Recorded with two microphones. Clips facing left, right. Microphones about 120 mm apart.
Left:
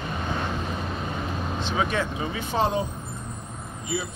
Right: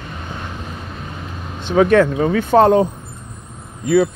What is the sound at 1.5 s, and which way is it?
Speech, 55° right (ahead or behind).